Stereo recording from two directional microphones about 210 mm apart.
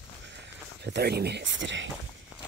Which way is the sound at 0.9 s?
50° right (ahead or behind).